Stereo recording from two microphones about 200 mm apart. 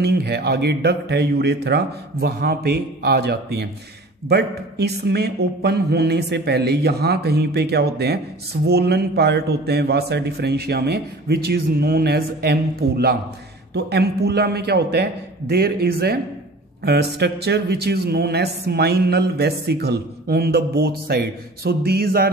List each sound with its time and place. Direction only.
0.0 s a man's voice: 55° right (ahead or behind)